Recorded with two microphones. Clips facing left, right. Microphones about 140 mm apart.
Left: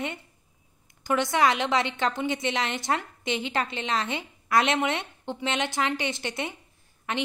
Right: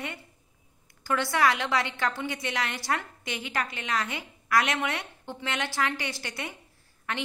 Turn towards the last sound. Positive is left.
turn(degrees=20)  # may be behind; listen again after turning